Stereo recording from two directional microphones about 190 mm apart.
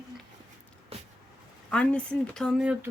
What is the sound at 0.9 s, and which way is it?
Vehicle, 30° right (ahead or behind).